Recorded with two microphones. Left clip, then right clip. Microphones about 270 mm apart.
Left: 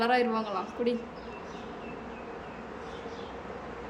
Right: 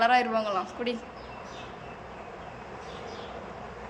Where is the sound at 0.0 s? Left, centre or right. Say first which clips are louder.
Right 3 dB; centre.